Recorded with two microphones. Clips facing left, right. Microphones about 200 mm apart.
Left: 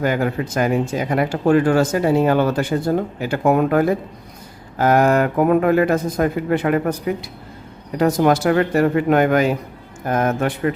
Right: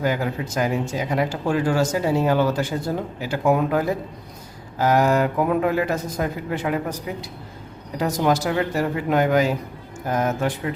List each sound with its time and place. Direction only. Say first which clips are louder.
0.0 s speech: left 4 dB; 60° left (ahead or behind)